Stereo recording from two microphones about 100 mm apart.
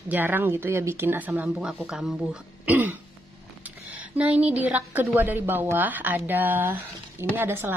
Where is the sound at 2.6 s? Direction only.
15° right (ahead or behind).